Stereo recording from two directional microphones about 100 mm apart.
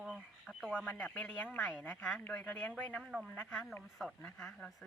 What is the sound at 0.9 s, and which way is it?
A woman's voice, 20° left (ahead or behind).